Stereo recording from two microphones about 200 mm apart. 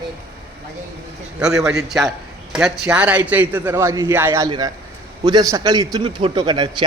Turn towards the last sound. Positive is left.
turn(degrees=-20)  # may be behind; listen again after turning